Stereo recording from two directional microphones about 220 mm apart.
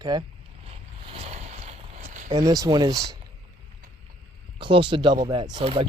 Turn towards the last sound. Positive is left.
turn(degrees=-25)  # may be behind; listen again after turning